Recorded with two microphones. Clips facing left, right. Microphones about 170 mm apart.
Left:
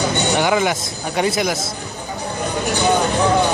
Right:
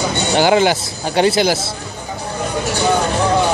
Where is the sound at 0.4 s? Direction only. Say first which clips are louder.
Right 8 dB; 30° right (ahead or behind).